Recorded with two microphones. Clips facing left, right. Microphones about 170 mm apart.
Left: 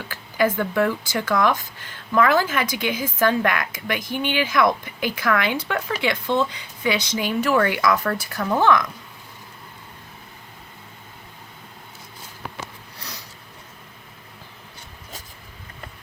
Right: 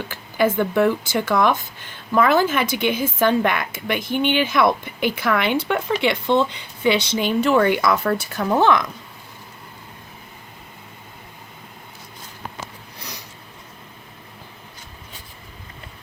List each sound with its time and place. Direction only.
0.1 s speech: 25° right (ahead or behind)